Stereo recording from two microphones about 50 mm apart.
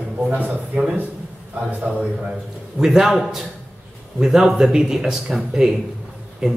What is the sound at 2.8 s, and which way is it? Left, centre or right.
Speech, centre.